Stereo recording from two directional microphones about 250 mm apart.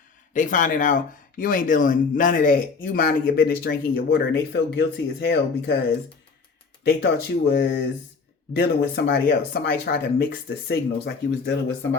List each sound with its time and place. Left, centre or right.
0.3 s speech: left
6.8 s speech: left